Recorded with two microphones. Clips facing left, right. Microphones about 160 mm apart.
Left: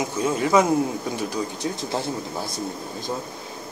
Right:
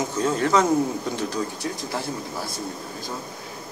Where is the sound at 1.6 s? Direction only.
25° left (ahead or behind).